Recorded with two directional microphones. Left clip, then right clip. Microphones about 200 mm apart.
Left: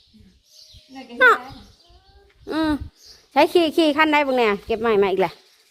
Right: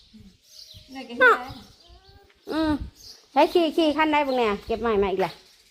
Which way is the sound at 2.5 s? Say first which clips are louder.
Left 3 dB; 25° left (ahead or behind).